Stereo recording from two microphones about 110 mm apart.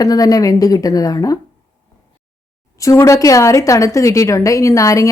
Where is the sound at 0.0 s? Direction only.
35° left (ahead or behind).